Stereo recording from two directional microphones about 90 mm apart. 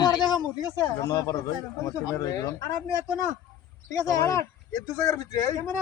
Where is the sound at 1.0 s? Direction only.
40° left (ahead or behind).